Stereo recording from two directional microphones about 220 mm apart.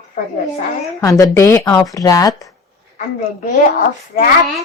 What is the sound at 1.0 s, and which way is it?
Speech, 15° left (ahead or behind).